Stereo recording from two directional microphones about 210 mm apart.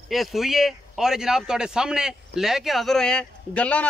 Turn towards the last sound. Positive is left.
turn(degrees=5)  # may be behind; listen again after turning